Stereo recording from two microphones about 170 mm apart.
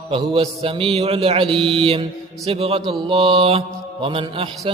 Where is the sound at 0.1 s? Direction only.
35° right (ahead or behind).